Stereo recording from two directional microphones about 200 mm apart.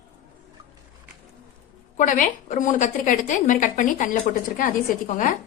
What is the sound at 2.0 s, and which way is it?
A woman's voice, 40° left (ahead or behind).